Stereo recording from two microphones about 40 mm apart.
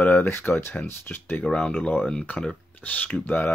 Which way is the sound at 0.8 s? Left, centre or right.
Left.